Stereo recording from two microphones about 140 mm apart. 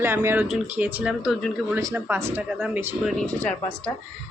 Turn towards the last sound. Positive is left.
turn(degrees=10)  # may be behind; listen again after turning